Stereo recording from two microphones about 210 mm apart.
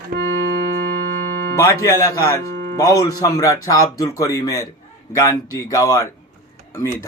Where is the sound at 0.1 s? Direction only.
50° right (ahead or behind).